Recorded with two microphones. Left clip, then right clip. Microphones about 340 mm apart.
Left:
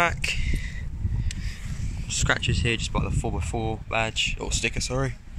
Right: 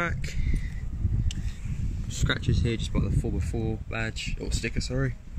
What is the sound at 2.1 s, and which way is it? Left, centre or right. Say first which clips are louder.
Speech: left 6 dB; centre.